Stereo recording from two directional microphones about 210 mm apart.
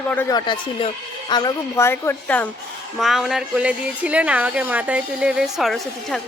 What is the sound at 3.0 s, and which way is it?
A woman's voice, centre (ahead or behind).